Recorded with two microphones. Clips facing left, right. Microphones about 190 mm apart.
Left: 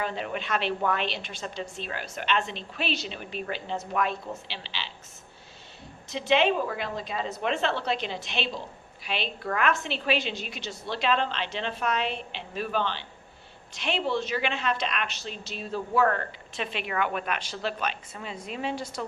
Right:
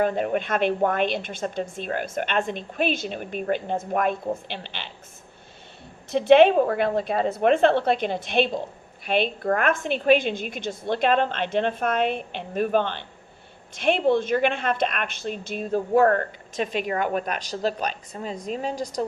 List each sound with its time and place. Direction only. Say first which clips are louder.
0.0 s a woman's voice: right 9 dB; 50° right (ahead or behind)
6.1 s a woman's voice: right 9 dB; 55° right (ahead or behind); by 19.0 s 40° right (ahead or behind)